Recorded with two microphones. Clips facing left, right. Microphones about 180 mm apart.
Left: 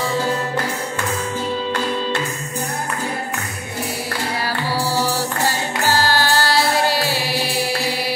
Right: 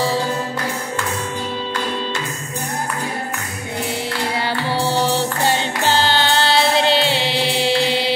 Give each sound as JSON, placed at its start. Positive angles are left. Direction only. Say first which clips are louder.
{"t": 4.5, "sound": "music", "louder": "right 2 dB", "side_deg": -25}